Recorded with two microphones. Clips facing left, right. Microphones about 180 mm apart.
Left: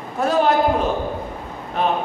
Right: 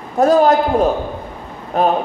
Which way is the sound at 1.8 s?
40° right (ahead or behind).